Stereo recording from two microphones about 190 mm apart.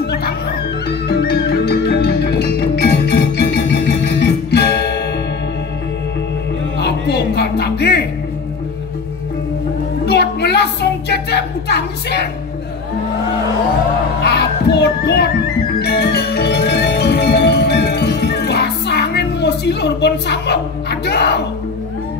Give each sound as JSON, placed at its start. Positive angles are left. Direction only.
{"t": 0.0, "sound": "music", "side_deg": 60}
{"t": 6.8, "sound": "music", "side_deg": 60}
{"t": 10.0, "sound": "a sound", "side_deg": 60}
{"t": 14.2, "sound": "music", "side_deg": 60}